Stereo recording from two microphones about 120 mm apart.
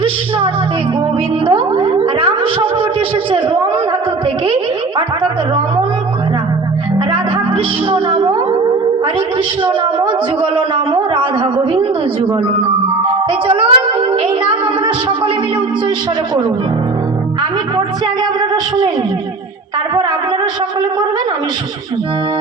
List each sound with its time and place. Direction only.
0.0 s a woman's voice: 50° right (ahead or behind)
1.5 s a sound: 45° right (ahead or behind)
7.1 s music: 45° right (ahead or behind)
9.6 s speech: 45° right (ahead or behind)
13.5 s a woman's voice: 45° right (ahead or behind)
17.7 s speech: 40° right (ahead or behind)